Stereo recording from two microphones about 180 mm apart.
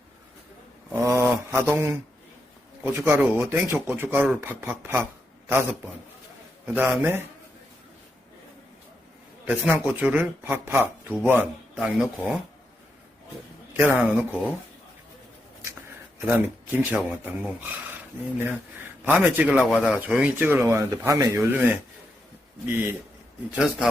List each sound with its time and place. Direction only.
0.9 s a sound: 15° right (ahead or behind)
1.5 s a man's voice: 15° right (ahead or behind)
6.7 s a man's voice: 10° right (ahead or behind)
9.5 s a man's voice: 10° right (ahead or behind)
14.0 s speech: 5° right (ahead or behind)
16.2 s a man's voice: 10° right (ahead or behind)